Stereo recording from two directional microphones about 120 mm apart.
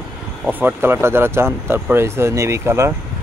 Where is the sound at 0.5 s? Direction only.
15° right (ahead or behind).